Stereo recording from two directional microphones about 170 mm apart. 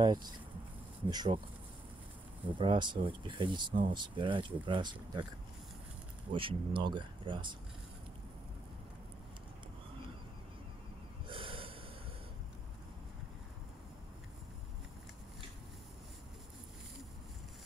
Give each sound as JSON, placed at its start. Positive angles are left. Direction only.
{"t": 0.0, "sound": "speech", "side_deg": -25}
{"t": 2.4, "sound": "speech", "side_deg": -30}
{"t": 6.3, "sound": "speech", "side_deg": -30}
{"t": 11.2, "sound": "snort", "side_deg": -30}